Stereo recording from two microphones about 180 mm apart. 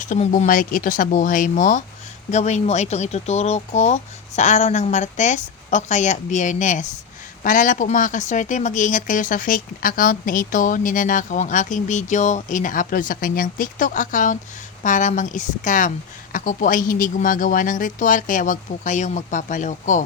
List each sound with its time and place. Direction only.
0.0 s speech: 45° left (ahead or behind)